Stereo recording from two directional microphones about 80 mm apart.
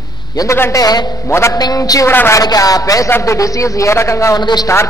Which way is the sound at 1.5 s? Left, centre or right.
Left.